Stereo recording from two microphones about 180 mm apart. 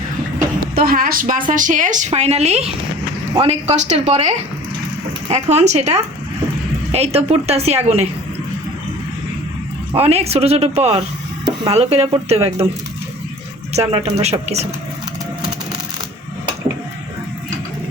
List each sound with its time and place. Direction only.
0.3 s a woman's voice: 55° right (ahead or behind); by 8.0 s 35° right (ahead or behind)
9.9 s a woman's voice: 35° right (ahead or behind)
13.9 s a woman's voice: 35° right (ahead or behind)